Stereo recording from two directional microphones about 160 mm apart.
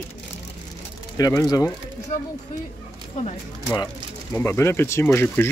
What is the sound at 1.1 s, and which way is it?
Speech, 20° left (ahead or behind).